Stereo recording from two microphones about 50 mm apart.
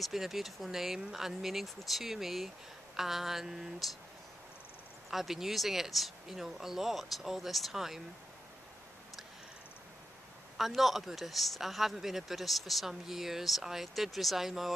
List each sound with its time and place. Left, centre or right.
0.0 s speech: centre
5.1 s speech: centre
10.6 s speech: centre